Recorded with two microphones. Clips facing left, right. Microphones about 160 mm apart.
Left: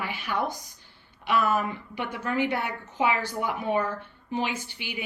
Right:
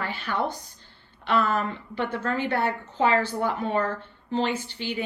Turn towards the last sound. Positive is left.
turn(degrees=10)  # may be behind; listen again after turning